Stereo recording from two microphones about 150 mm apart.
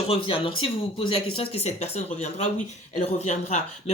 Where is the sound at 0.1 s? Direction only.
35° left (ahead or behind).